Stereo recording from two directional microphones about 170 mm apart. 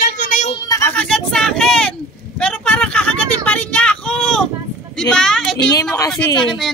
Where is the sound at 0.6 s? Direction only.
20° left (ahead or behind).